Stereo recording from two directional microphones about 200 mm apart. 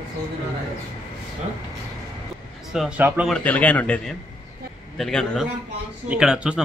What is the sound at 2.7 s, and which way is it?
Speech, 5° right (ahead or behind).